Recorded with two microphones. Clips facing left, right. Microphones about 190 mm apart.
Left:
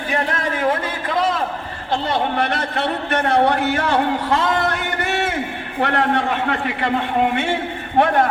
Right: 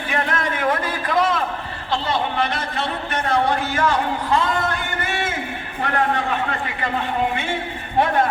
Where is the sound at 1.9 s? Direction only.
60° left (ahead or behind).